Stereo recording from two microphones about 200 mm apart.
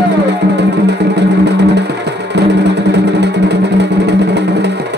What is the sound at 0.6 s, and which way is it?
Music, 60° right (ahead or behind).